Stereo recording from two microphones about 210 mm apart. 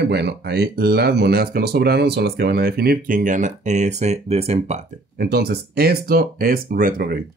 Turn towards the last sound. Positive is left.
turn(degrees=-45)  # may be behind; listen again after turning